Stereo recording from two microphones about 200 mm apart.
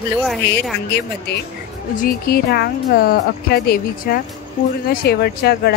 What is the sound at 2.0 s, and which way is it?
A woman's voice, 50° left (ahead or behind).